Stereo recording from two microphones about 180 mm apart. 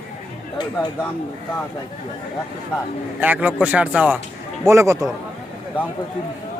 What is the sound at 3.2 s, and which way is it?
Speech, 10° right (ahead or behind).